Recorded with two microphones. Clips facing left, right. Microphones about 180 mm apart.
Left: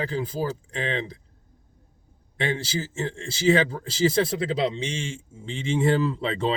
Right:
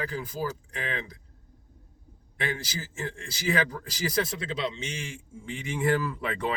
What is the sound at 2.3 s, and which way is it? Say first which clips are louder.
Speech: left 6 dB; 30° left (ahead or behind).